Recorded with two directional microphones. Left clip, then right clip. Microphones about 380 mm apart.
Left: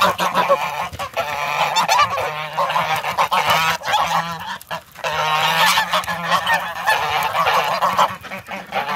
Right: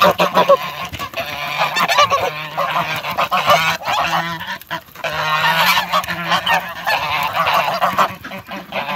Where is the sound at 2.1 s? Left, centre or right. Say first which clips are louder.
Right 2 dB; centre.